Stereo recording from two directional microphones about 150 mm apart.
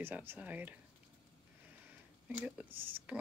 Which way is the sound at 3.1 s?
10° right (ahead or behind).